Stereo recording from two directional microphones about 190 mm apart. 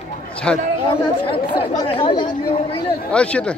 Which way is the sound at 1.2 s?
30° left (ahead or behind).